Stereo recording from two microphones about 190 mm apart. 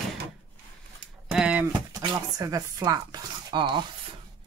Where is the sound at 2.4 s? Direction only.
20° right (ahead or behind).